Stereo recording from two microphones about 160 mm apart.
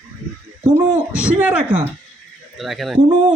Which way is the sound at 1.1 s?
10° right (ahead or behind).